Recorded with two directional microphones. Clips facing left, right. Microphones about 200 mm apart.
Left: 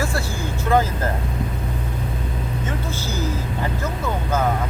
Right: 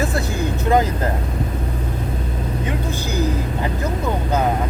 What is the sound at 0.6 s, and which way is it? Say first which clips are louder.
Vehicle: right 1 dB; 20° right (ahead or behind).